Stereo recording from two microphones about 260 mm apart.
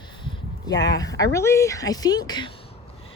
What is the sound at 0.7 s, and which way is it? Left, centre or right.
Speech, centre.